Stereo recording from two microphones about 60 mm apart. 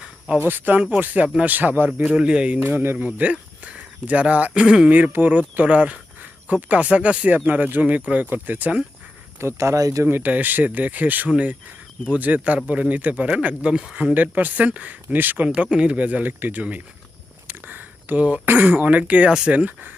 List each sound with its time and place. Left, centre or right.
0.3 s speech: right
2.0 s speech: centre
2.7 s speech: right
4.9 s speech: right
9.4 s speech: right
10.1 s speech: right
15.4 s speech: centre
17.5 s a sound: right
18.4 s speech: right